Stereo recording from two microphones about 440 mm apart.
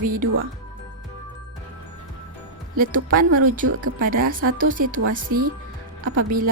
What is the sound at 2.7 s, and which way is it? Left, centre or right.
Speech, centre.